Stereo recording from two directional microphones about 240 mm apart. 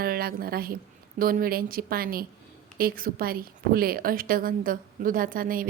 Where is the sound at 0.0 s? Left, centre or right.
Right.